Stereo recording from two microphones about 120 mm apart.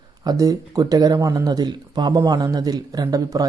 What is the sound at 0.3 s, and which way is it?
Speech, 30° right (ahead or behind).